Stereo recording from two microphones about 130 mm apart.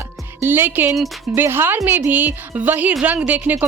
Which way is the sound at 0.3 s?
15° right (ahead or behind).